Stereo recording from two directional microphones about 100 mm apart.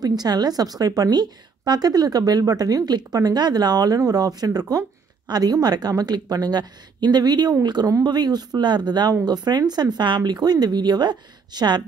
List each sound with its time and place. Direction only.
0.0 s a woman's voice: 40° right (ahead or behind)